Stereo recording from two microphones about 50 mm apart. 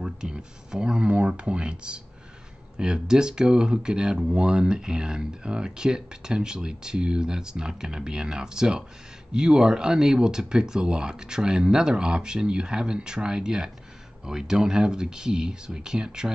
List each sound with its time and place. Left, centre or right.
0.0 s speech: centre